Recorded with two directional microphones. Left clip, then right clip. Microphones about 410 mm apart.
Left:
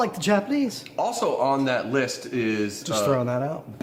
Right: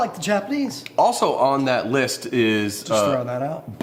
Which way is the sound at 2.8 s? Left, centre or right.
Left.